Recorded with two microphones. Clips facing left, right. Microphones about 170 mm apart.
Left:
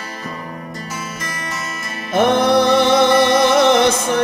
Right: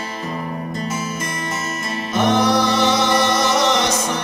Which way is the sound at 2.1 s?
55° left (ahead or behind).